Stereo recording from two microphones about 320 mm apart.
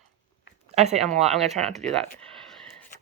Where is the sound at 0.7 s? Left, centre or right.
Centre.